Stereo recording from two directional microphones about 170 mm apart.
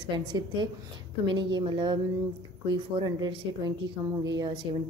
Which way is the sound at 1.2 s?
25° right (ahead or behind).